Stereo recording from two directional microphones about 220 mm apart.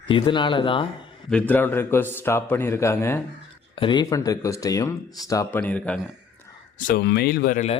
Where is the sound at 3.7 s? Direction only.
20° left (ahead or behind); by 6.0 s 5° left (ahead or behind).